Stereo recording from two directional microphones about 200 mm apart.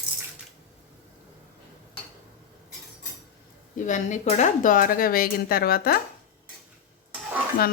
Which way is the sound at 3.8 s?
40° left (ahead or behind).